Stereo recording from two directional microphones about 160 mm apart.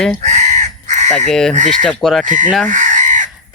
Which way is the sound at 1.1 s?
5° left (ahead or behind).